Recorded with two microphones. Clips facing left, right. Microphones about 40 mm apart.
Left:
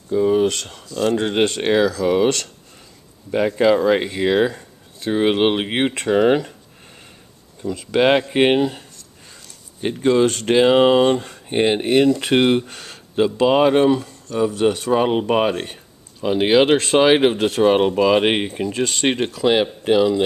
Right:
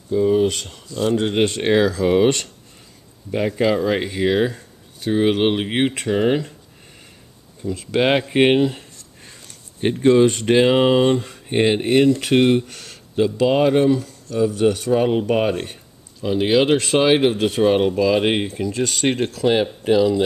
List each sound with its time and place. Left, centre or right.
0.1 s a sound: centre
0.8 s speech: centre
1.2 s speech: centre
1.6 s speech: centre
1.9 s speech: centre
3.3 s speech: centre
7.9 s speech: centre
9.2 s a sound: right
9.9 s speech: centre
10.8 s speech: centre
12.1 s speech: left
13.1 s speech: left
16.2 s speech: left